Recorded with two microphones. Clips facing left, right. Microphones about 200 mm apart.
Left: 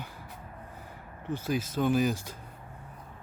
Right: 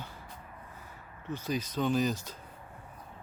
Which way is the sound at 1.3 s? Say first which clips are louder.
Left 3 dB; 10° left (ahead or behind).